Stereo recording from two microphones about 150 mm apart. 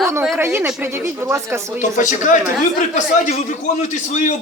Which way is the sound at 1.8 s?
55° left (ahead or behind).